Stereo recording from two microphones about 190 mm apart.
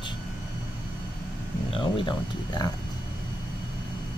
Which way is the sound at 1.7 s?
30° left (ahead or behind).